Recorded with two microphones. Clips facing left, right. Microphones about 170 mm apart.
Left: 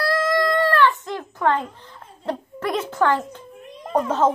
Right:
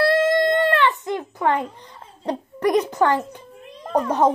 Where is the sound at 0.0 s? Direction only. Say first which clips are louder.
Right 3 dB; 25° right (ahead or behind).